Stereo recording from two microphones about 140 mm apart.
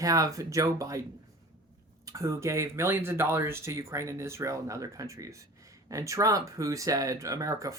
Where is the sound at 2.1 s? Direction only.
20° right (ahead or behind).